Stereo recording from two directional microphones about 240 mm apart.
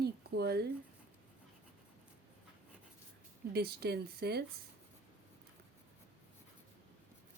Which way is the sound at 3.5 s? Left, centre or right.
Right.